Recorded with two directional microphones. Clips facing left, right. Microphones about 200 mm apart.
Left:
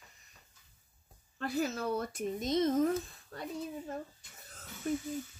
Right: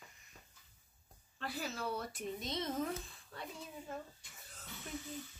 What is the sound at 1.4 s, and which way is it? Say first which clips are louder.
Speech: left 8 dB; 45° left (ahead or behind).